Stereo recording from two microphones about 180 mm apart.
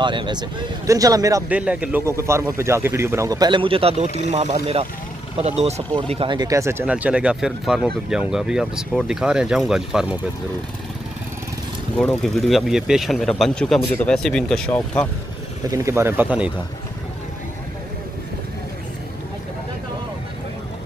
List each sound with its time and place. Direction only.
0.0 s speech: 25° right (ahead or behind)
1.5 s a man's voice: 5° right (ahead or behind)
12.0 s speech: 5° left (ahead or behind)
15.7 s a man's voice: 15° right (ahead or behind)